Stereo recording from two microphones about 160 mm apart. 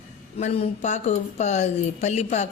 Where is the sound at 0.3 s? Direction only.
40° left (ahead or behind).